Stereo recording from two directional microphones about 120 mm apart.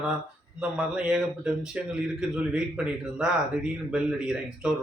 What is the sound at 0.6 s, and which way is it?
A man's voice, 10° right (ahead or behind).